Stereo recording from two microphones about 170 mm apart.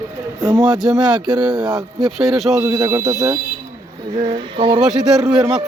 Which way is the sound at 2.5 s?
20° right (ahead or behind).